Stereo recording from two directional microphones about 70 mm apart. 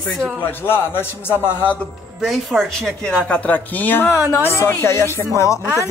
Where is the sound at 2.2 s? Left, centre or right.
Centre.